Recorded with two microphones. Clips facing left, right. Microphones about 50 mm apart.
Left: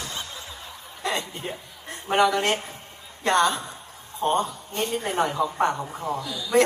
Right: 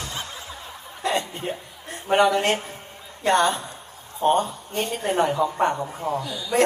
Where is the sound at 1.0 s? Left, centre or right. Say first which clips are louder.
Right 3 dB; right.